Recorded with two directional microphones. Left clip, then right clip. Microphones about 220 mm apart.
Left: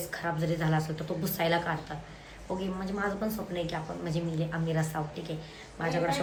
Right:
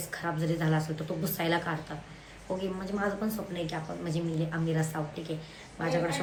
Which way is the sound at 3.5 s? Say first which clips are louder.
Left 1 dB; centre (ahead or behind).